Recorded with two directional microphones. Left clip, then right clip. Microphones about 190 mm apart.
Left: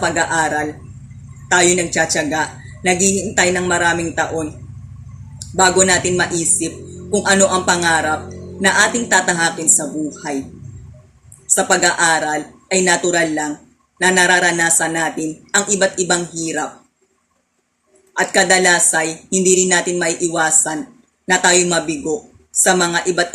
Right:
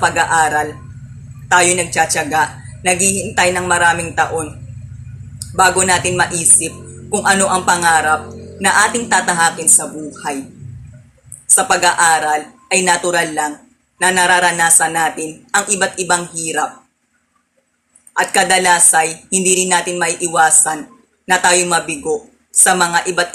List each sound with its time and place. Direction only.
0.0 s a woman's voice: 15° left (ahead or behind)
5.5 s a woman's voice: 15° left (ahead or behind)
11.5 s a woman's voice: 15° left (ahead or behind)
18.2 s a woman's voice: 15° left (ahead or behind)